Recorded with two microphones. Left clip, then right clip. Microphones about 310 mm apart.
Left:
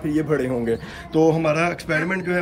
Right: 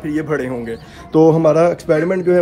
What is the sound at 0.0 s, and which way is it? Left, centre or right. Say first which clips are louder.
Speech: right 2 dB; centre.